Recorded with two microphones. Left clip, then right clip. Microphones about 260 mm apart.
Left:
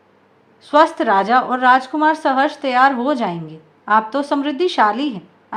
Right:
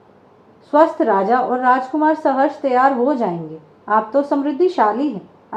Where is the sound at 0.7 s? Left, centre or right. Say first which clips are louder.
Left 1 dB; left.